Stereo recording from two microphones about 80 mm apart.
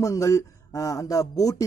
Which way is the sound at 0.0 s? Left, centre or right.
Left.